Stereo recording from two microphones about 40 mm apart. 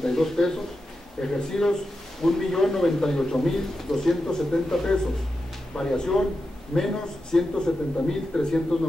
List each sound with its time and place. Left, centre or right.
0.0 s a man's voice: centre